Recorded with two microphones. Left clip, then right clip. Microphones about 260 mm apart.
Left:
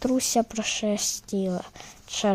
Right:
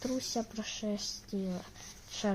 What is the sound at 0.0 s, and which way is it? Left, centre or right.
Speech, left.